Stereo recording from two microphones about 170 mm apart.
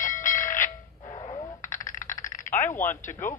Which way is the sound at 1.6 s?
50° left (ahead or behind).